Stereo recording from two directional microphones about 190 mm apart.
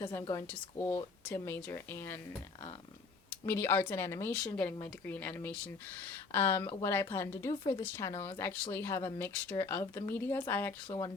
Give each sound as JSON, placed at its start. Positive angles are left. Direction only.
{"t": 0.0, "sound": "speech", "side_deg": 15}
{"t": 3.2, "sound": "speech", "side_deg": 15}